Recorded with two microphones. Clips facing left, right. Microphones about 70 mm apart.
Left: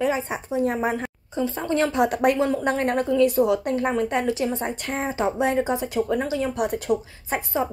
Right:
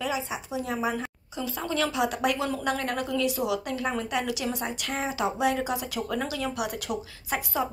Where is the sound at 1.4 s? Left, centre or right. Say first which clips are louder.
Left 5 dB; left.